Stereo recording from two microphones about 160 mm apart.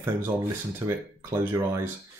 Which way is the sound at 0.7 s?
15° right (ahead or behind).